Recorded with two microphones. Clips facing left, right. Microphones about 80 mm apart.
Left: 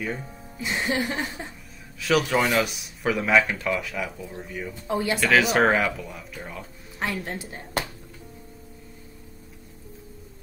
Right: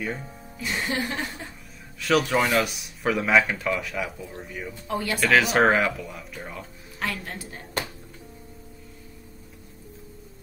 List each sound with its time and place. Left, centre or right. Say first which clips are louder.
0.0 s speech: even; centre
0.6 s a woman's voice: left 2 dB; left
1.1 s a man's voice: left 1 dB; centre
4.8 s a woman's voice: left 2 dB; left
5.3 s speech: right 1 dB; centre
7.0 s a woman's voice: left 2 dB; left